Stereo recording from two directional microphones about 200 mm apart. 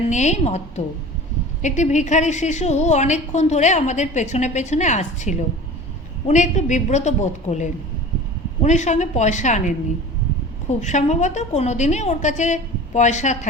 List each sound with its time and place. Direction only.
0.1 s a woman's voice: 35° left (ahead or behind)
1.6 s a woman's voice: 35° left (ahead or behind)